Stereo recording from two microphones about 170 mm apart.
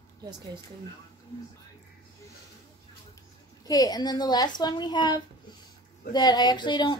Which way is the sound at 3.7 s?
20° left (ahead or behind).